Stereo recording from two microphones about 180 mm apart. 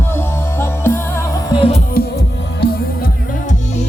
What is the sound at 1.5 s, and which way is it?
Music, 30° left (ahead or behind).